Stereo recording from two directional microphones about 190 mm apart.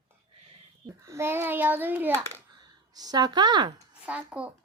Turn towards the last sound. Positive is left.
turn(degrees=-5)  # may be behind; listen again after turning